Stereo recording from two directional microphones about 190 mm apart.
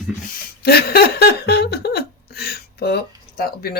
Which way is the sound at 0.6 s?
55° left (ahead or behind).